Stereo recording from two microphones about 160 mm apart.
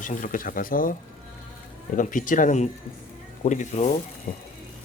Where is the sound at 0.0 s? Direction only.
55° left (ahead or behind).